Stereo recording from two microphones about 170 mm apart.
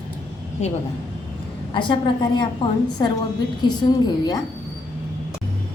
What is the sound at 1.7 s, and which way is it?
Speech, 25° left (ahead or behind).